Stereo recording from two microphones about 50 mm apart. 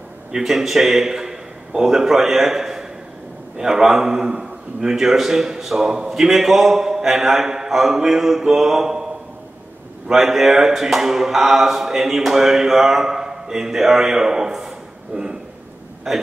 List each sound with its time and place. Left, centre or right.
0.3 s a man's voice: centre
10.0 s a man's voice: centre
15.1 s speech: centre
16.1 s a man's voice: centre